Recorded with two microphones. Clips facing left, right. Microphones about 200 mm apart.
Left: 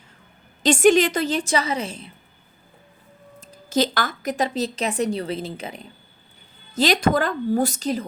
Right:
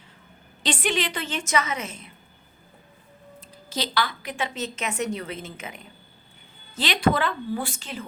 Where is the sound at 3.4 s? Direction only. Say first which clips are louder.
Left 10 dB; 45° left (ahead or behind).